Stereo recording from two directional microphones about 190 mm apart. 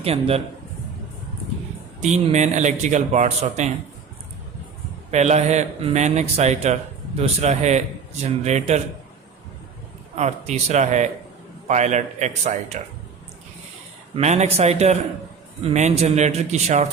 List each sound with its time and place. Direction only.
0.0 s speech: 30° right (ahead or behind)
2.0 s speech: 35° right (ahead or behind)
5.1 s speech: 35° right (ahead or behind)
10.2 s speech: 35° right (ahead or behind)
14.2 s speech: 35° right (ahead or behind)